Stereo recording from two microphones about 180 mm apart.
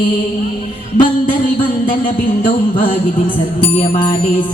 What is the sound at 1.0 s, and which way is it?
Music, 50° left (ahead or behind).